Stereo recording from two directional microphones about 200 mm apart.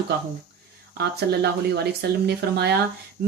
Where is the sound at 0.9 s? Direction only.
55° right (ahead or behind).